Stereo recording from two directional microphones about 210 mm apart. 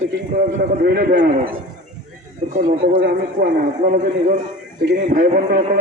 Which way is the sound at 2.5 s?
40° right (ahead or behind).